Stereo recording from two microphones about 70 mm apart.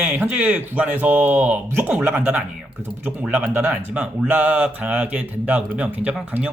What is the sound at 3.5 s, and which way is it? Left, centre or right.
Speech, right.